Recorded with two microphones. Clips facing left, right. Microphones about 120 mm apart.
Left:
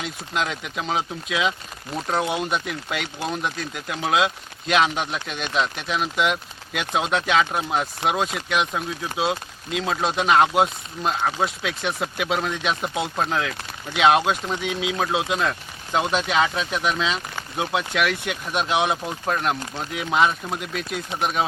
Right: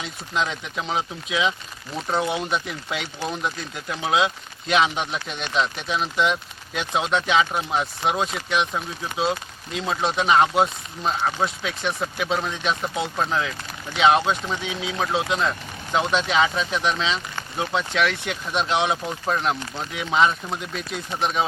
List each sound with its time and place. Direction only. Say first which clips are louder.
0.0 s speech: even; 5° left (ahead or behind)